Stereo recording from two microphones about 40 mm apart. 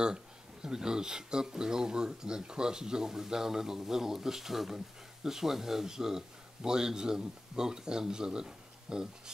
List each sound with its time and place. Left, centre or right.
0.0 s speech: centre